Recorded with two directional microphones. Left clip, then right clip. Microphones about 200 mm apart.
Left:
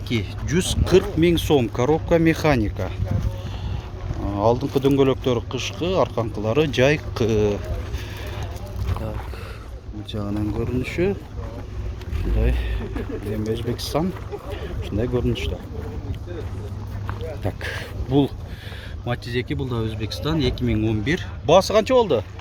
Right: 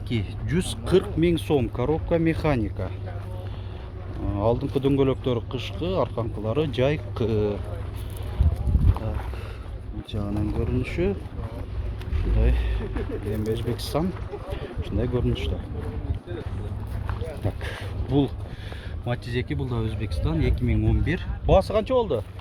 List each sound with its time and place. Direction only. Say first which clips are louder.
0.1 s speech: left 5 dB; 10° left (ahead or behind)
4.3 s speech: left 4 dB; 10° left (ahead or behind)
10.1 s speech: left 3 dB; 10° left (ahead or behind)
13.5 s speech: left 3 dB; 10° left (ahead or behind)
17.4 s speech: left 7 dB; 25° left (ahead or behind)